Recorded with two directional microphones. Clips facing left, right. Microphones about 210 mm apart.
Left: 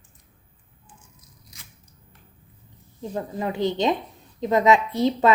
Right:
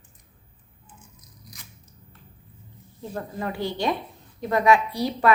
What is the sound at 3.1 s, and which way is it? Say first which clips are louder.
A woman's voice: left 3 dB; 20° left (ahead or behind).